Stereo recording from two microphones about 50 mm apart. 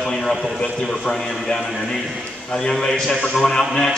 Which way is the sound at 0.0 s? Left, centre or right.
Centre.